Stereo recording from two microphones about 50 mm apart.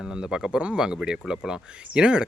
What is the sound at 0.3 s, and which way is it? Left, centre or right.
Speech, centre.